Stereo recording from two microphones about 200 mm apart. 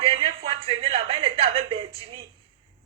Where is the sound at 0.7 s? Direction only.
30° right (ahead or behind).